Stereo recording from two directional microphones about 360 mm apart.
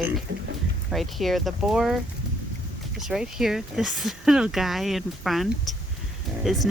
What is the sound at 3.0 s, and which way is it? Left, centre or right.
Speech, centre.